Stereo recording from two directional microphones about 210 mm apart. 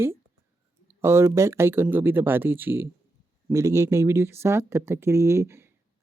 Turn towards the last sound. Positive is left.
turn(degrees=-10)  # may be behind; listen again after turning